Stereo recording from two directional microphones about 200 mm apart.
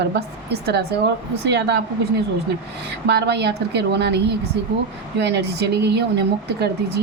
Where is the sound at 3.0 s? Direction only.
55° right (ahead or behind).